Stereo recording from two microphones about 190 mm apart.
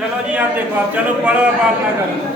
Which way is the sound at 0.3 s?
5° right (ahead or behind).